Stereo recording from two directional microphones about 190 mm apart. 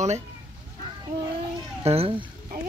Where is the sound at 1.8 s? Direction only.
30° right (ahead or behind).